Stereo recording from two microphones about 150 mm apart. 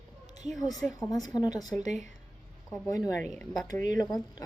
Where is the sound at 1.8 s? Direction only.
50° right (ahead or behind).